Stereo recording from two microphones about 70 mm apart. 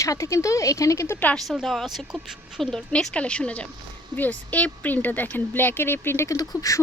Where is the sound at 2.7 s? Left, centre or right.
Centre; by 6.4 s left.